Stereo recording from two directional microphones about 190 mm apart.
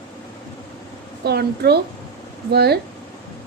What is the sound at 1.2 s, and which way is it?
A woman's voice, 55° right (ahead or behind).